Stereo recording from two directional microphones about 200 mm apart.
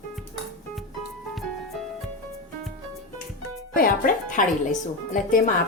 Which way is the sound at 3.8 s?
45° left (ahead or behind).